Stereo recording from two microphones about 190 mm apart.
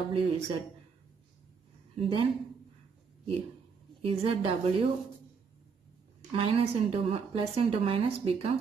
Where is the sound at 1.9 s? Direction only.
25° right (ahead or behind).